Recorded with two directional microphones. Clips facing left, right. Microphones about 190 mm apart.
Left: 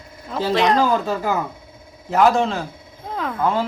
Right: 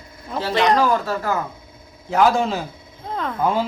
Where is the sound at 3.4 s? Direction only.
10° right (ahead or behind).